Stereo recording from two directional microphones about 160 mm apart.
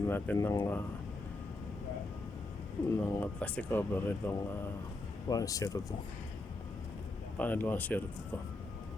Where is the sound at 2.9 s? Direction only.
20° left (ahead or behind).